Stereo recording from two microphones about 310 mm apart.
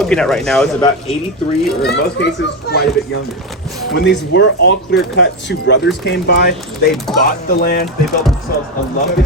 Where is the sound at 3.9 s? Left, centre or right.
Left.